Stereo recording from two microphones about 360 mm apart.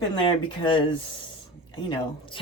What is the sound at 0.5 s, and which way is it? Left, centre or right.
Speech, centre.